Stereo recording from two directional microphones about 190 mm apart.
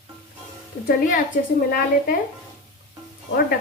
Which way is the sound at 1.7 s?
50° left (ahead or behind).